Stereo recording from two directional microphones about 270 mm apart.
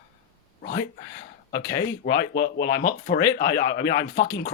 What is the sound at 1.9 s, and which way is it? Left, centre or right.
Speech, left.